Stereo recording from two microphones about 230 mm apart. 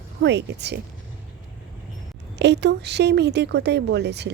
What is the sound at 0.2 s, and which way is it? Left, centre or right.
Speech, right.